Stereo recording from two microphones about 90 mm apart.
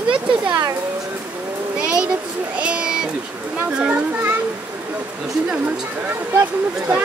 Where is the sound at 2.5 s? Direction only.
10° right (ahead or behind).